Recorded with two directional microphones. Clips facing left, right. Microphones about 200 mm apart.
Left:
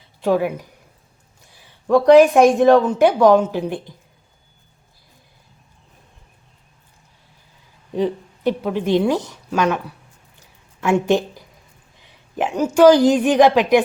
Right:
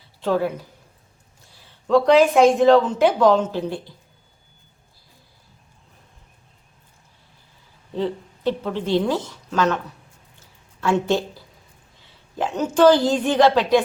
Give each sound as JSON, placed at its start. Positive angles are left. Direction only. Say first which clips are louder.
{"t": 0.2, "sound": "a woman's voice", "louder": "left 3 dB", "side_deg": 15}
{"t": 7.9, "sound": "a woman's voice", "louder": "left 4 dB", "side_deg": 15}